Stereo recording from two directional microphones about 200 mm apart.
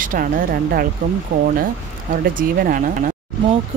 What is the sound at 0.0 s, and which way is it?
Speech, 45° right (ahead or behind).